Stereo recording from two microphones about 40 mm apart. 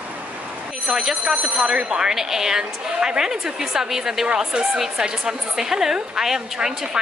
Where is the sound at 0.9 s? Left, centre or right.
Centre.